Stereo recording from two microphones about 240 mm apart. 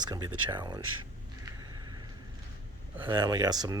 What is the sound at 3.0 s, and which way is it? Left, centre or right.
Speech, centre.